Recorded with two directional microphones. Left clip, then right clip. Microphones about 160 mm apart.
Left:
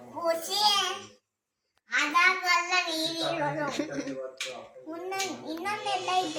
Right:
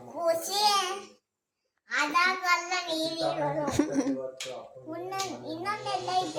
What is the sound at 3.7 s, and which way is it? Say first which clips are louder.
Speech: right 4 dB; 65° right (ahead or behind).